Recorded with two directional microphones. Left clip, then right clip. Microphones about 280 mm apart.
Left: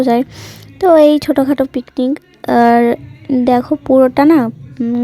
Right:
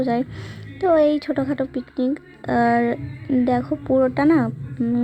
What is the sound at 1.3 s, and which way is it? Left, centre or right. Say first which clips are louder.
A woman's voice: left 10 dB; left.